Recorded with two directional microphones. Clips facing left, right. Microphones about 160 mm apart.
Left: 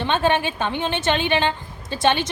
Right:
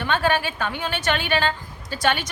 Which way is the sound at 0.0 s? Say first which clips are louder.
Left 2 dB; 20° left (ahead or behind).